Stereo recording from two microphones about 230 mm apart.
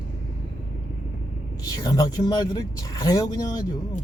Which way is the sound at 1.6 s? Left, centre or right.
Centre.